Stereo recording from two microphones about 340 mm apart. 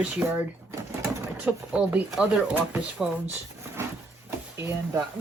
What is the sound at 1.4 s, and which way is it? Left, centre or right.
Speech, centre.